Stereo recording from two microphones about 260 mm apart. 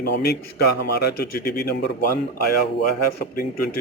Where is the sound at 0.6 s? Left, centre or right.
Left.